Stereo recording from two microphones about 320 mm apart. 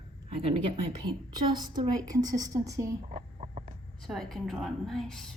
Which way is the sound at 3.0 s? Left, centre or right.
Right.